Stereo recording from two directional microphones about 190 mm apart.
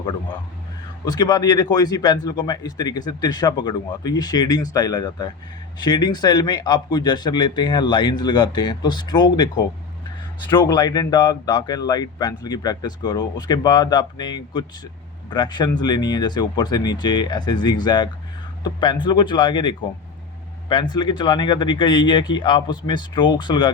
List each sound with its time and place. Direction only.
1.0 s a man's voice: 20° left (ahead or behind)
20.9 s a man's voice: 25° left (ahead or behind)